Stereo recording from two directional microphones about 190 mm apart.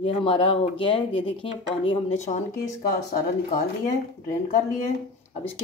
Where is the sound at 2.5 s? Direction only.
50° left (ahead or behind).